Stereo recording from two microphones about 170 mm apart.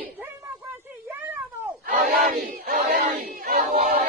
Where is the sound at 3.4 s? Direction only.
55° right (ahead or behind).